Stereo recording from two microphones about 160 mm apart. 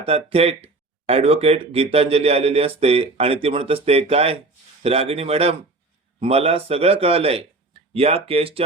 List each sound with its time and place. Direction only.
0.0 s speech: 40° right (ahead or behind)